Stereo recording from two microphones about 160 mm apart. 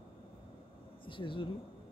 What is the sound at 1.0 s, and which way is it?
Speech, 30° left (ahead or behind).